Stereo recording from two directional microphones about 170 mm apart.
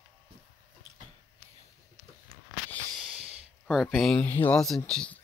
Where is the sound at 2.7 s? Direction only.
Centre (ahead or behind).